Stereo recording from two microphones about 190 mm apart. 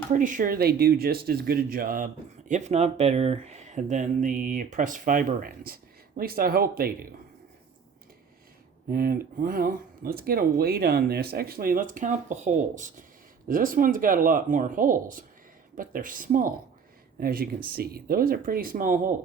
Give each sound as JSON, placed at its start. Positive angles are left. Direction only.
{"t": 0.1, "sound": "speech", "side_deg": -40}
{"t": 2.5, "sound": "speech", "side_deg": -35}
{"t": 8.9, "sound": "speech", "side_deg": -50}